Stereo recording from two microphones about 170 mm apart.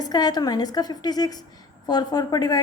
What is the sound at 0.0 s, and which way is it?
A woman's voice, 25° left (ahead or behind).